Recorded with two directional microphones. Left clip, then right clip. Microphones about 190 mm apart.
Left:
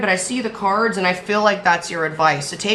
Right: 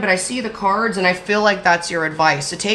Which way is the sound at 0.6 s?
15° right (ahead or behind).